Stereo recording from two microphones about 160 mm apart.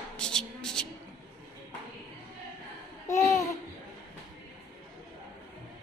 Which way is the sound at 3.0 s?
20° left (ahead or behind).